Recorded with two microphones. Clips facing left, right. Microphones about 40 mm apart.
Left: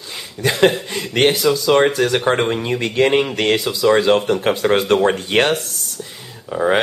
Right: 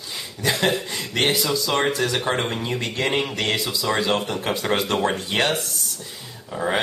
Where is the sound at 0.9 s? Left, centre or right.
Left.